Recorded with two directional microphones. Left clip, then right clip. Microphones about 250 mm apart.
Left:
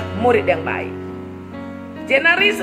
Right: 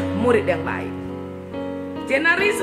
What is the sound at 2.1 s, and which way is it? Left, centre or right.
Music, centre.